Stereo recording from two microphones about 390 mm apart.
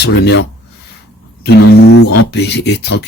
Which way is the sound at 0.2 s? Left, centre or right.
Left.